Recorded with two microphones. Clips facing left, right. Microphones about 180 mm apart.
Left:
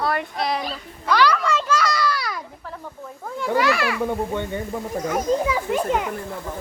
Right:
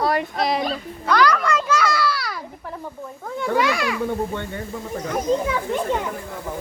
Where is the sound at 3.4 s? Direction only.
5° left (ahead or behind).